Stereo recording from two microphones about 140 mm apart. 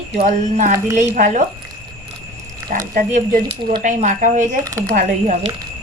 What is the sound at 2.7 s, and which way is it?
A woman's voice, 65° right (ahead or behind).